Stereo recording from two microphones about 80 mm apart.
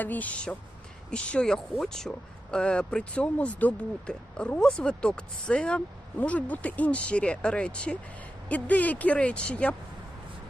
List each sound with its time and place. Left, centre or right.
0.0 s speech: left